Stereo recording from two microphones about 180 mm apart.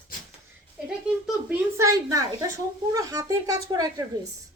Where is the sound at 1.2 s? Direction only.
10° right (ahead or behind).